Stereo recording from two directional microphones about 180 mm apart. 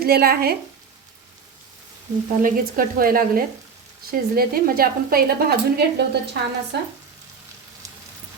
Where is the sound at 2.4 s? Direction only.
50° right (ahead or behind).